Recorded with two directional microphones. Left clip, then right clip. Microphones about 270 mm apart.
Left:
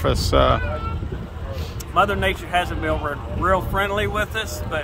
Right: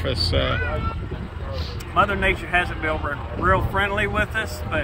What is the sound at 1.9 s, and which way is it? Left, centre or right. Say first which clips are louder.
Speech: left 1 dB; left.